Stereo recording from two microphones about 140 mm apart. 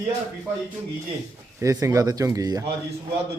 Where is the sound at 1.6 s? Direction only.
25° right (ahead or behind).